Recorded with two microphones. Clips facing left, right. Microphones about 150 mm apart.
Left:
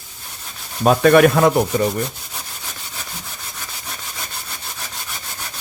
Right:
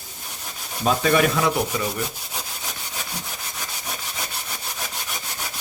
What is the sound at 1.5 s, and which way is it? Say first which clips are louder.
Rub: left 7 dB; 40° left (ahead or behind).